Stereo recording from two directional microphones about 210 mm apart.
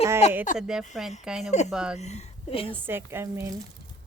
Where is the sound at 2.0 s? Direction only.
30° left (ahead or behind).